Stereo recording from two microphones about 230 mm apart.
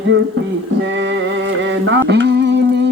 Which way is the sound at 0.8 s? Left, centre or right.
Right.